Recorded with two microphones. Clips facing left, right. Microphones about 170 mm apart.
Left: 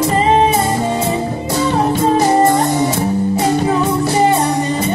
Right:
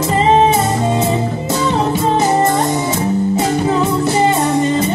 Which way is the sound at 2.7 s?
20° right (ahead or behind).